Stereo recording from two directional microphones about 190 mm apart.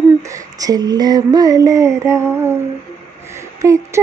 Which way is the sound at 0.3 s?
20° right (ahead or behind).